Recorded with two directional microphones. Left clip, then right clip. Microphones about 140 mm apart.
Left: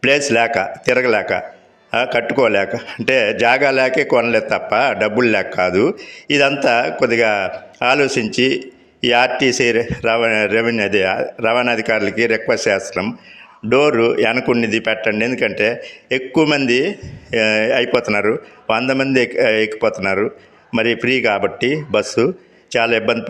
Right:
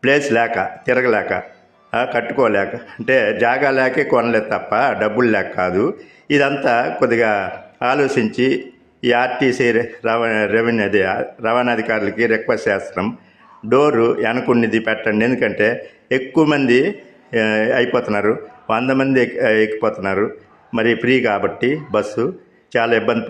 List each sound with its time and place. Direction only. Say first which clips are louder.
0.0 s a man's voice: left 1 dB; 10° left (ahead or behind)
14.3 s a man's voice: even; centre (ahead or behind)
14.6 s a man's voice: left 1 dB; 15° left (ahead or behind)